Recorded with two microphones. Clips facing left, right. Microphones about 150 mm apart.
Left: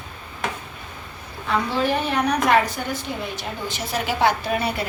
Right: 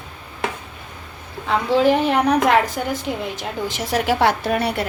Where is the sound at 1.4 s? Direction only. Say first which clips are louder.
Right 6 dB; 90° right.